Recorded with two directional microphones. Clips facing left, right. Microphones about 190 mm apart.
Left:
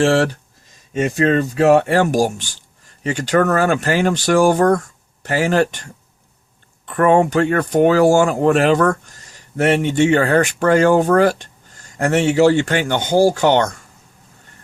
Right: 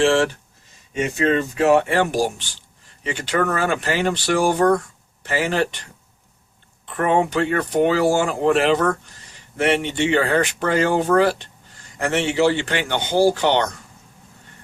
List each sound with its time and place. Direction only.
0.0 s speech: 40° left (ahead or behind)